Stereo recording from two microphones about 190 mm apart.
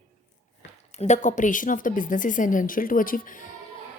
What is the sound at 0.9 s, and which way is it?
Speech, 40° left (ahead or behind).